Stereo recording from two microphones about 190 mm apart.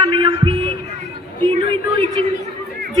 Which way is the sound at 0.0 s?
25° right (ahead or behind).